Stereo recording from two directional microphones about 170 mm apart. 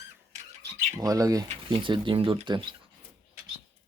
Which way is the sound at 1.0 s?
20° right (ahead or behind).